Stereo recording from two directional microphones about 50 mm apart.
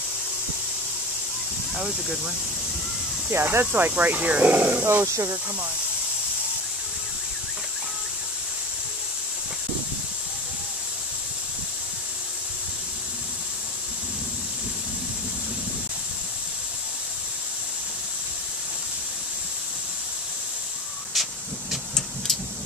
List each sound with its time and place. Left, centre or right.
1.8 s speech: centre
3.3 s speech: right
3.9 s speech: right
5.0 s speech: right